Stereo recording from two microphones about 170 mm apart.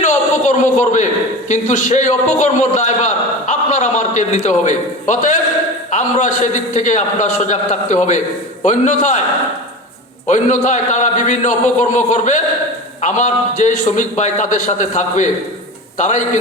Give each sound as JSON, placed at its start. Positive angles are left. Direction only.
{"t": 0.0, "sound": "a sound", "side_deg": 45}
{"t": 1.5, "sound": "a man's voice", "side_deg": 45}
{"t": 10.2, "sound": "a man's voice", "side_deg": 45}